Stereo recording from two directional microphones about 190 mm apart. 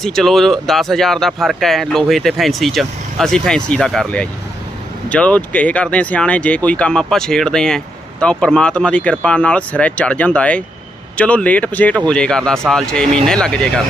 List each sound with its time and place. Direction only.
0.0 s speech: centre (ahead or behind)